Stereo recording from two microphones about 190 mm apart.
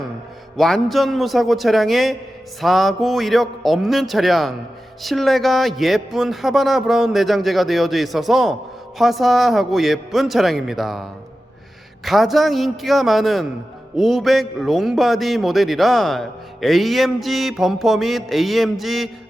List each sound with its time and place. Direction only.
0.5 s a man's voice: centre (ahead or behind)